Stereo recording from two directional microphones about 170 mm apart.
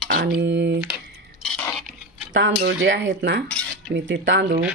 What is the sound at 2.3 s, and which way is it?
Speech, 90° right.